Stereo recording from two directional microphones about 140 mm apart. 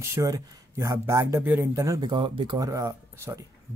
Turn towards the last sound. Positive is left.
turn(degrees=-25)  # may be behind; listen again after turning